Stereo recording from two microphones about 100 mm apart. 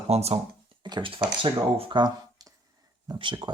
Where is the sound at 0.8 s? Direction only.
50° right (ahead or behind).